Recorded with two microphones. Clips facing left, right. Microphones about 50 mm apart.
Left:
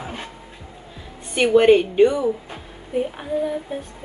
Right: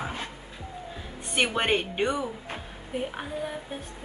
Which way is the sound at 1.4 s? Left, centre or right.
Centre.